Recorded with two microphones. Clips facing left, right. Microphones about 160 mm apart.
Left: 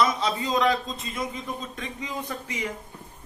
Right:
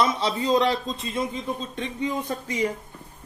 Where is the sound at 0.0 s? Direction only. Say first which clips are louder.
Right 1 dB; 30° right (ahead or behind).